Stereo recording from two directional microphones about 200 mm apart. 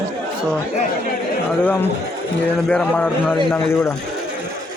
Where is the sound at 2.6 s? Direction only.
5° left (ahead or behind).